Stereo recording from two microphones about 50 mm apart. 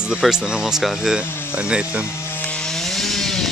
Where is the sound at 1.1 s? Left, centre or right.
Centre.